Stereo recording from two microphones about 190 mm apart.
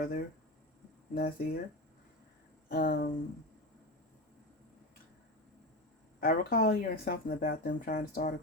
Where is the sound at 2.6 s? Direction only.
50° left (ahead or behind).